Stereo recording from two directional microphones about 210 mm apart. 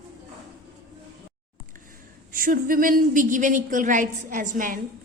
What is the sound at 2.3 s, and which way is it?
A woman's voice, 40° right (ahead or behind).